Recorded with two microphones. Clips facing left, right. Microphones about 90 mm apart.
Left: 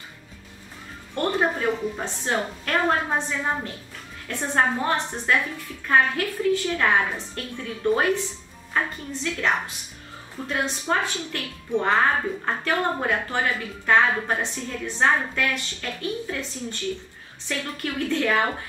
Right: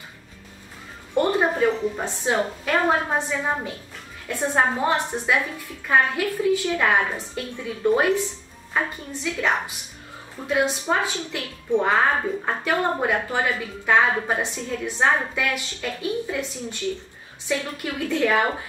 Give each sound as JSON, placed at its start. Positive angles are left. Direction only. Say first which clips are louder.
{"t": 1.1, "sound": "a sound", "louder": "right 3 dB", "side_deg": -10}
{"t": 2.0, "sound": "a woman's voice", "louder": "right 3 dB", "side_deg": -15}
{"t": 17.5, "sound": "a woman's voice", "louder": "right 3 dB", "side_deg": -10}